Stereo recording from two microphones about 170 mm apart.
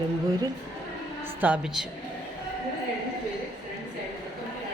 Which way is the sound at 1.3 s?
10° right (ahead or behind).